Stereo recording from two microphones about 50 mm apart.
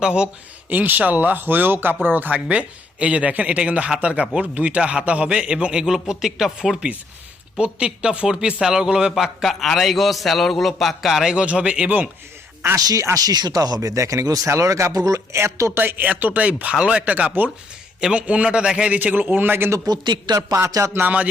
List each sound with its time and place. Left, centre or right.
0.0 s a man's voice: centre
0.7 s speech: right
2.3 s a man's voice: right
5.8 s a man's voice: centre
9.1 s a man's voice: centre
11.3 s a man's voice: right
13.1 s speech: right
13.9 s speech: right
15.8 s speech: right
16.0 s a man's voice: right
18.9 s speech: right
20.5 s a sound: right
21.0 s a man's voice: right